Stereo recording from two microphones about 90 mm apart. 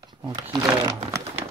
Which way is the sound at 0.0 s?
50° right (ahead or behind).